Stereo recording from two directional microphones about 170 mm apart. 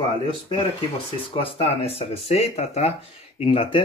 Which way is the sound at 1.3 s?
30° left (ahead or behind).